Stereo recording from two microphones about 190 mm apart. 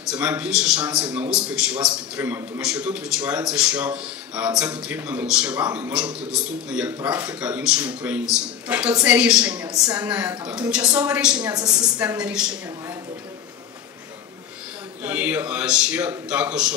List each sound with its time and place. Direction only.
0.1 s a man's voice: 5° right (ahead or behind)
9.7 s a woman's voice: 20° right (ahead or behind)
10.0 s a man's voice: 5° right (ahead or behind)
15.0 s a man's voice: 10° right (ahead or behind)